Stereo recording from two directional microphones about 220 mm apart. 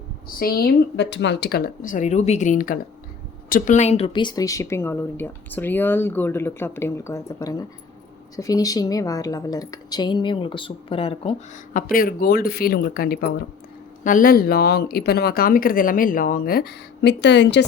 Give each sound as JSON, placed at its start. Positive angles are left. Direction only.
{"t": 0.3, "sound": "speech", "side_deg": 40}
{"t": 11.7, "sound": "speech", "side_deg": 40}